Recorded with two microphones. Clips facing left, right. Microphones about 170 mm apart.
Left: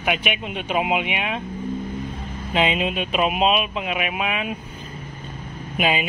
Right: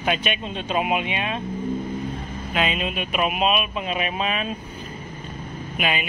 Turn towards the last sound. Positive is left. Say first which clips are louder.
# left 4 dB
turn(degrees=25)  # may be behind; listen again after turning